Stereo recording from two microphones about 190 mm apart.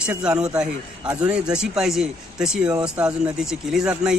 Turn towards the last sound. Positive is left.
turn(degrees=-5)  # may be behind; listen again after turning